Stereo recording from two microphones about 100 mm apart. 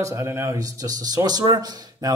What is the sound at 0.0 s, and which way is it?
Speech, 25° right (ahead or behind).